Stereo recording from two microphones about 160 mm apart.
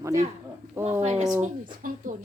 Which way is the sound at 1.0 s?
45° right (ahead or behind).